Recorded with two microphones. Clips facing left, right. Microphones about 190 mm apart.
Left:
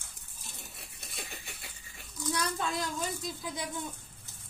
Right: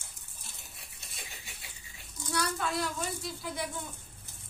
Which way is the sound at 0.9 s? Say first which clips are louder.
Left 5 dB; 55° left (ahead or behind).